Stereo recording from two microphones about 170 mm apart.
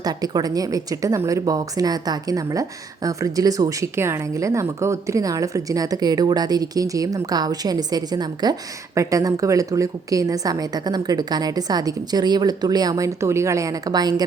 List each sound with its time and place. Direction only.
0.0 s speech: 25° right (ahead or behind)